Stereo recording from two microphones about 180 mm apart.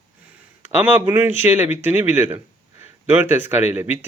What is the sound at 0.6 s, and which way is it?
Speech, 10° right (ahead or behind).